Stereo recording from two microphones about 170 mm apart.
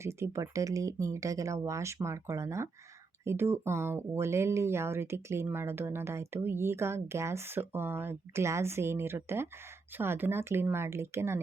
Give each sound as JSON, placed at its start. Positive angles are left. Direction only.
{"t": 0.0, "sound": "speech", "side_deg": -15}